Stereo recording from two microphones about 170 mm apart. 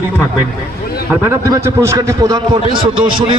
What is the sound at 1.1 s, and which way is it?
A man's voice, 15° right (ahead or behind).